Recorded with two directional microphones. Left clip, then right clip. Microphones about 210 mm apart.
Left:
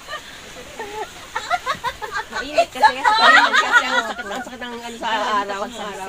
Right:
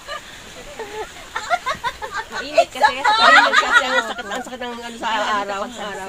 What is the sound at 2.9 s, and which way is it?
Speech, 55° right (ahead or behind).